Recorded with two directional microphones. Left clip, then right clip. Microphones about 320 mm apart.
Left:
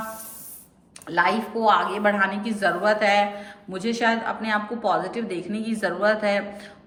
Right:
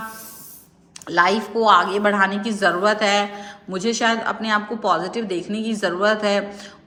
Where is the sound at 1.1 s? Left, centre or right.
Centre.